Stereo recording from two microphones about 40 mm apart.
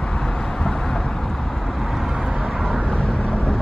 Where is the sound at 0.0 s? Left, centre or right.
Centre.